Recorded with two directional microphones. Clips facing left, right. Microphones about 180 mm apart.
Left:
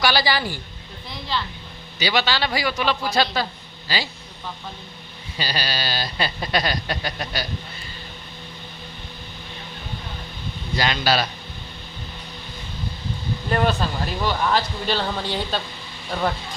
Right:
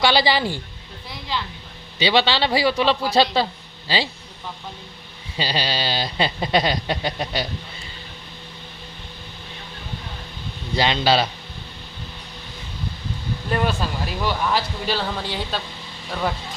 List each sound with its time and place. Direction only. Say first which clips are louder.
0.0 s speech: right 3 dB; 25° right (ahead or behind)
1.3 s speech: left 1 dB; 15° right (ahead or behind)
2.0 s speech: right 3 dB; 30° right (ahead or behind)
5.4 s speech: right 3 dB; 25° right (ahead or behind)
10.8 s speech: right 3 dB; 25° right (ahead or behind)
13.5 s speech: left 1 dB; 5° right (ahead or behind)